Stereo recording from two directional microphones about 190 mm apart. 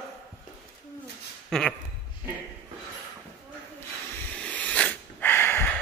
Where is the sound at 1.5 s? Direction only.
5° left (ahead or behind).